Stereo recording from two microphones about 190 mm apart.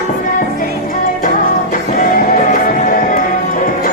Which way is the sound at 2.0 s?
40° left (ahead or behind).